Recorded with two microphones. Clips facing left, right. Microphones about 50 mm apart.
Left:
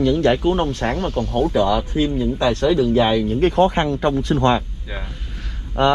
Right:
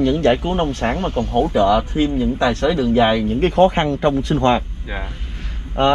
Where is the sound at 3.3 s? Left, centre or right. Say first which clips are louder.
Right 2 dB; right.